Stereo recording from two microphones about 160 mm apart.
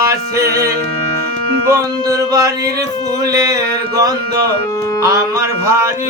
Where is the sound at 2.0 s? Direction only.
20° right (ahead or behind).